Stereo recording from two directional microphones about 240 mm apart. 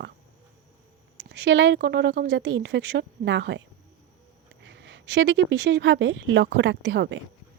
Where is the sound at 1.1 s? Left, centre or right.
Right.